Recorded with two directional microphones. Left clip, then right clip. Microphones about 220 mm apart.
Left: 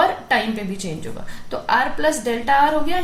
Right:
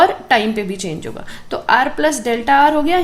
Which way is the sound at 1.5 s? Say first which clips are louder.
Right 5 dB; 40° right (ahead or behind).